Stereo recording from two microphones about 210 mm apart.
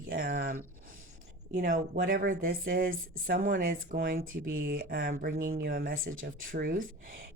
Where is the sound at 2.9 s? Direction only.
70° right (ahead or behind).